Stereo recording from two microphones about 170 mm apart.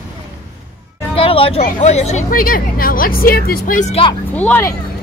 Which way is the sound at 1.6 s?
45° left (ahead or behind).